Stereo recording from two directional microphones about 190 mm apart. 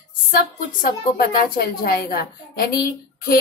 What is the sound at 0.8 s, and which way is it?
A woman's voice, 50° left (ahead or behind).